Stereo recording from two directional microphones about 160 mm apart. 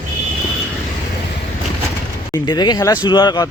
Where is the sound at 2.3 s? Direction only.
25° left (ahead or behind).